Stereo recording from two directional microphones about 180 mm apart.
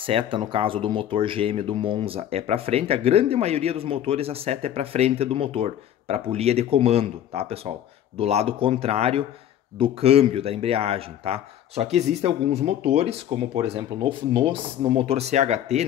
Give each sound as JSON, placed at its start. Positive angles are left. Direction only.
{"t": 0.0, "sound": "speech", "side_deg": -30}